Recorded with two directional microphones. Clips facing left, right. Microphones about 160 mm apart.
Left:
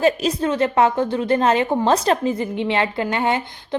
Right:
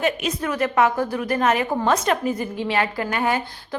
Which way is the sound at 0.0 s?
30° left (ahead or behind).